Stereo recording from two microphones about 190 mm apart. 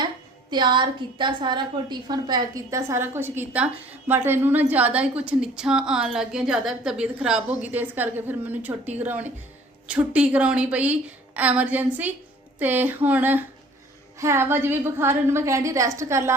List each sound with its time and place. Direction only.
0.5 s a woman's voice: 25° right (ahead or behind)